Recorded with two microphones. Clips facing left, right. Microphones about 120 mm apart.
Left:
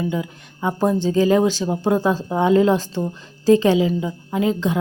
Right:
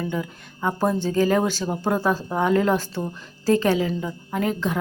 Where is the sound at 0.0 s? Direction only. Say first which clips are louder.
Left 3 dB; 15° left (ahead or behind).